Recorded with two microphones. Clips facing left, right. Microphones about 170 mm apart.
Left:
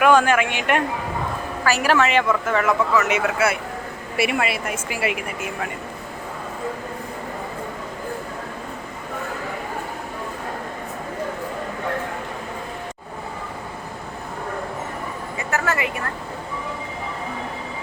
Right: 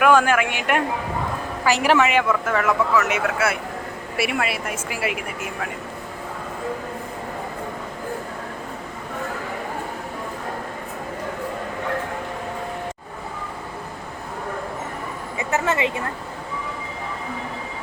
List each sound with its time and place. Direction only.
0.0 s speech: 5° right (ahead or behind)
1.6 s a woman's voice: 20° right (ahead or behind)
2.0 s speech: centre (ahead or behind)
15.4 s a sound: 25° right (ahead or behind)